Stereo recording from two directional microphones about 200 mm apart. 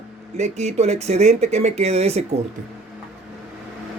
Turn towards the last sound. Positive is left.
turn(degrees=-30)  # may be behind; listen again after turning